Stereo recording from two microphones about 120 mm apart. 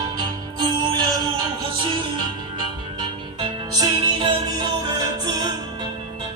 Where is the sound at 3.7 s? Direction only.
35° right (ahead or behind).